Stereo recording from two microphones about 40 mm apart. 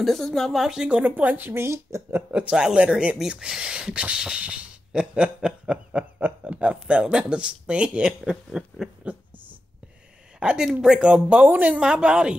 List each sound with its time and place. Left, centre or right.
0.0 s speech: centre
0.6 s speech: centre
0.8 s speech: right
1.3 s speech: right
2.5 s speech: centre
2.8 s speech: right
3.3 s speech: centre; by 9.2 s right
10.4 s speech: centre
11.0 s speech: right